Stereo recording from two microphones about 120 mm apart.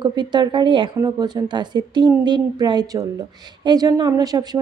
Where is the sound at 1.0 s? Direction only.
35° right (ahead or behind).